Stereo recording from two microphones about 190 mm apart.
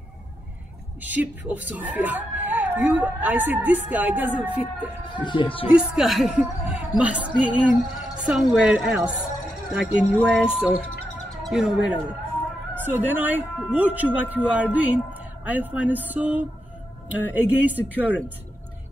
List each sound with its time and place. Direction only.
1.0 s speech: 10° right (ahead or behind)
5.2 s speech: 25° left (ahead or behind)
5.7 s a woman's voice: 5° right (ahead or behind)